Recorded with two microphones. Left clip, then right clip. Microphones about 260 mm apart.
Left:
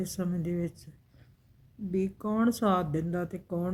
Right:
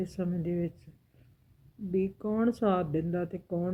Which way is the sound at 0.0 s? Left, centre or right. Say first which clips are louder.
Even; centre.